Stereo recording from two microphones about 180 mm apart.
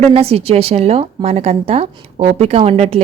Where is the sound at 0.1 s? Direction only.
35° right (ahead or behind).